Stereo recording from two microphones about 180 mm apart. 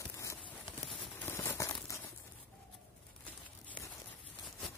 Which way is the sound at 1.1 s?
15° left (ahead or behind).